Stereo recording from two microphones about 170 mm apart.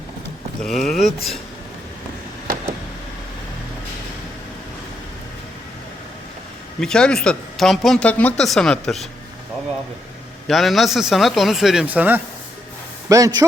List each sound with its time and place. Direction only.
0.6 s speech: centre (ahead or behind)
6.7 s speech: 5° left (ahead or behind)
10.4 s speech: centre (ahead or behind)
13.1 s a man's voice: 20° right (ahead or behind)